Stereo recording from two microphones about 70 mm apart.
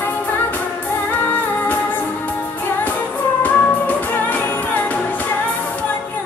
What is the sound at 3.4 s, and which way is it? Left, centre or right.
Music, left.